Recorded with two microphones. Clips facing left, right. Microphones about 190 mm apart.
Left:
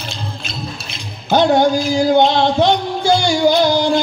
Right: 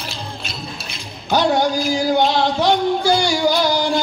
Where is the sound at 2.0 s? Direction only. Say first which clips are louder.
Left 5 dB; 25° left (ahead or behind).